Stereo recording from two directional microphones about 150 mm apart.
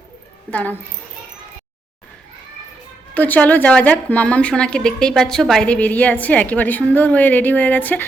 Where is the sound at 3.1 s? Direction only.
10° left (ahead or behind).